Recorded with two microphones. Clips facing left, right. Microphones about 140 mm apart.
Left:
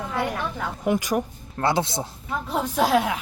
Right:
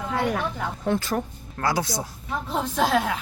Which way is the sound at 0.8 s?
15° left (ahead or behind).